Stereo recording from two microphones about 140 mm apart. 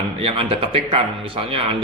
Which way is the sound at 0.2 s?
45° right (ahead or behind).